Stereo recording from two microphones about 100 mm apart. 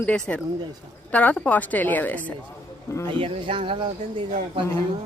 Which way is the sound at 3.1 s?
60° right (ahead or behind).